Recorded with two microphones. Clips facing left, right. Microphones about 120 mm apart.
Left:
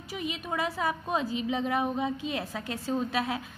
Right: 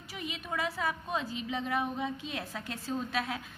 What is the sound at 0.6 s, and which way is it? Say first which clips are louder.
Speech: left 3 dB; 20° left (ahead or behind).